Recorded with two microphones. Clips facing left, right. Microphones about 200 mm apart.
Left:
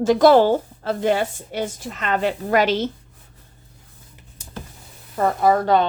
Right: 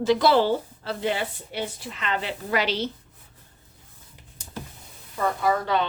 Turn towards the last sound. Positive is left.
turn(degrees=45)  # may be behind; listen again after turning